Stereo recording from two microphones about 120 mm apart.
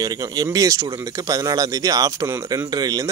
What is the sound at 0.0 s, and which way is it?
A man's voice, 30° right (ahead or behind).